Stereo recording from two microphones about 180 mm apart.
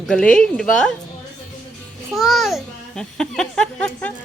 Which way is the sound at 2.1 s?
Centre (ahead or behind).